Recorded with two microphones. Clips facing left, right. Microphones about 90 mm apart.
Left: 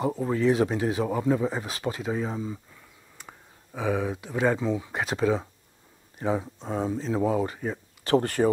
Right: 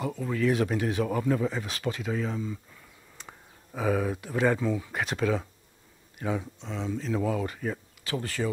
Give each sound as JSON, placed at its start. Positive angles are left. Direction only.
{"t": 0.0, "sound": "speech", "side_deg": 30}
{"t": 3.9, "sound": "speech", "side_deg": 10}
{"t": 6.6, "sound": "speech", "side_deg": 45}
{"t": 6.9, "sound": "speech", "side_deg": 30}
{"t": 8.0, "sound": "speech", "side_deg": 55}